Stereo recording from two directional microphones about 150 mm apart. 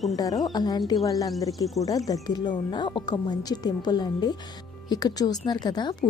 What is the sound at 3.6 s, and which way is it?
A woman's voice, 25° left (ahead or behind).